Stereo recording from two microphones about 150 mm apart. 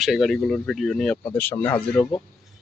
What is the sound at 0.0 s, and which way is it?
Speech, centre (ahead or behind).